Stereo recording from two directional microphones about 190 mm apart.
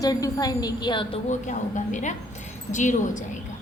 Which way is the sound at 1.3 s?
40° left (ahead or behind).